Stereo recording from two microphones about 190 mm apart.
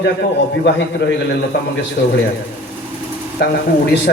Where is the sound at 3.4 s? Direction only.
60° left (ahead or behind).